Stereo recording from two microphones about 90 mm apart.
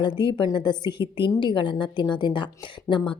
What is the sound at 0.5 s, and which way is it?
A woman's voice, 55° left (ahead or behind).